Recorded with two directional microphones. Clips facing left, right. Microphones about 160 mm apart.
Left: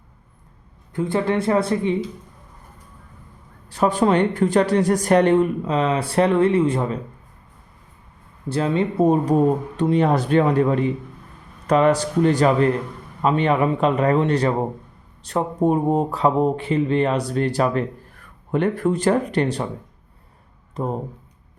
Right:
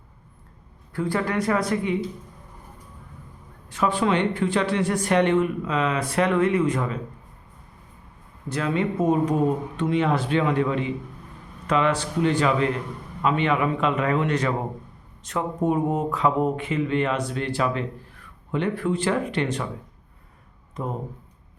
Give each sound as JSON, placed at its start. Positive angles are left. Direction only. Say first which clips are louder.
{"t": 0.9, "sound": "speech", "louder": "left 4 dB", "side_deg": 20}
{"t": 3.7, "sound": "speech", "louder": "left 4 dB", "side_deg": 40}
{"t": 8.4, "sound": "speech", "louder": "left 4 dB", "side_deg": 30}
{"t": 20.8, "sound": "speech", "louder": "left 5 dB", "side_deg": 30}